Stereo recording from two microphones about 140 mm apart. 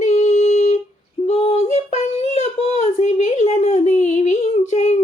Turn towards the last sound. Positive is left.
turn(degrees=55)  # may be behind; listen again after turning